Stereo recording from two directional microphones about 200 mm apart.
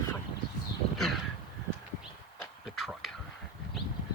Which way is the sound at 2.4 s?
Centre (ahead or behind).